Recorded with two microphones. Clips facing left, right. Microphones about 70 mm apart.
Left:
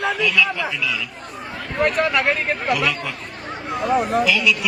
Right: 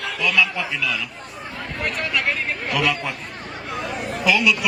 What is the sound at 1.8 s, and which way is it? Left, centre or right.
Speech, left.